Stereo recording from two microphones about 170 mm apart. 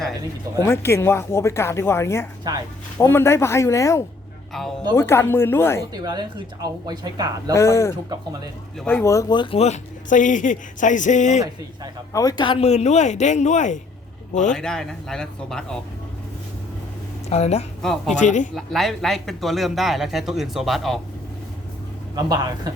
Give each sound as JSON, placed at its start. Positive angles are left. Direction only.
{"t": 0.6, "sound": "speech", "side_deg": 15}
{"t": 5.9, "sound": "a woman's voice", "side_deg": -25}
{"t": 7.5, "sound": "speech", "side_deg": 15}
{"t": 8.1, "sound": "a woman's voice", "side_deg": -20}
{"t": 8.8, "sound": "speech", "side_deg": 10}
{"t": 12.1, "sound": "speech", "side_deg": 20}
{"t": 14.5, "sound": "speech", "side_deg": 5}
{"t": 17.2, "sound": "a woman's voice", "side_deg": 40}
{"t": 17.8, "sound": "speech", "side_deg": 0}
{"t": 18.2, "sound": "speech", "side_deg": 45}
{"t": 18.5, "sound": "speech", "side_deg": 0}
{"t": 22.1, "sound": "a woman's voice", "side_deg": -25}